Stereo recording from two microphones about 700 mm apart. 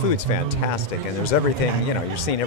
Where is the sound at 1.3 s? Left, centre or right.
Left.